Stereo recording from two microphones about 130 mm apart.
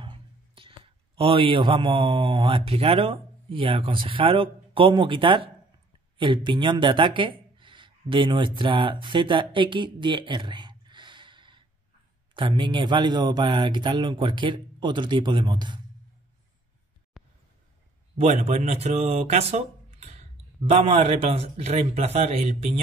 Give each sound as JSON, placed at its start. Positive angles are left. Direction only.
{"t": 0.0, "sound": "a man's voice", "side_deg": -40}
{"t": 17.1, "sound": "a sound", "side_deg": 0}
{"t": 18.2, "sound": "speech", "side_deg": -60}